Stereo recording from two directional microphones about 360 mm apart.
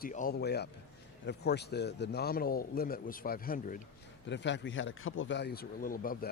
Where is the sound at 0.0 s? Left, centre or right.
Left.